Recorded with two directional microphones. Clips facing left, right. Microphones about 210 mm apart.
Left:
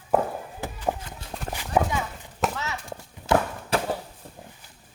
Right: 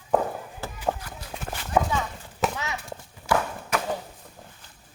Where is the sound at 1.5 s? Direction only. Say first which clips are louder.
Even; 15° left (ahead or behind).